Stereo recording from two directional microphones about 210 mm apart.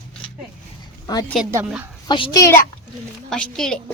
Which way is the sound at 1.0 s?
20° left (ahead or behind).